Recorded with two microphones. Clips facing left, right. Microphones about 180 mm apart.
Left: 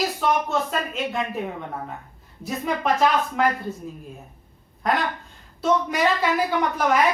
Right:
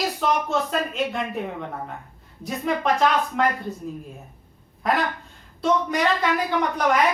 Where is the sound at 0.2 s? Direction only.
Centre (ahead or behind).